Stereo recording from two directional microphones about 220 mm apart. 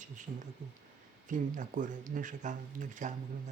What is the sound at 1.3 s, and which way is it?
Speech, 35° right (ahead or behind).